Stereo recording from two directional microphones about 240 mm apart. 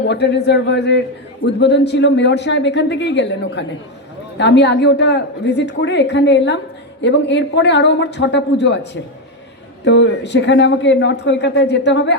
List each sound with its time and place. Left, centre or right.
0.1 s a man's voice: left